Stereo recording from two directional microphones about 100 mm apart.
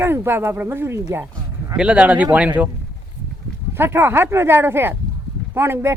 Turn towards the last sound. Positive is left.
turn(degrees=-25)  # may be behind; listen again after turning